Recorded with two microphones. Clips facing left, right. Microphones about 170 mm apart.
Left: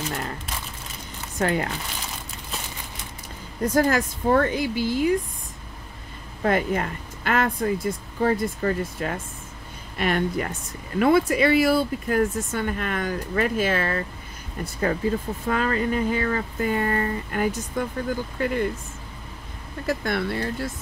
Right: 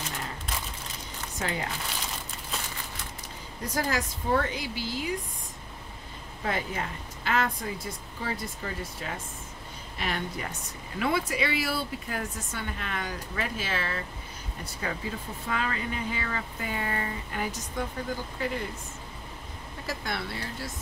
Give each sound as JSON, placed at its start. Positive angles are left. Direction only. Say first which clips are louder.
{"t": 1.4, "sound": "a woman's voice", "louder": "left 9 dB", "side_deg": 60}
{"t": 3.6, "sound": "speech", "louder": "left 9 dB", "side_deg": 50}
{"t": 6.4, "sound": "a woman's voice", "louder": "left 9 dB", "side_deg": 55}
{"t": 19.9, "sound": "speech", "louder": "left 9 dB", "side_deg": 55}